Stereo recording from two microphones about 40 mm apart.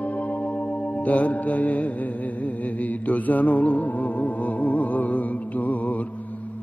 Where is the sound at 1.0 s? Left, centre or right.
Left.